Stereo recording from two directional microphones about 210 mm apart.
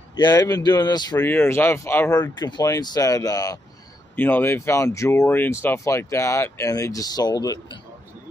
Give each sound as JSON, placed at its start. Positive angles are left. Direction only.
{"t": 0.2, "sound": "speech", "side_deg": 15}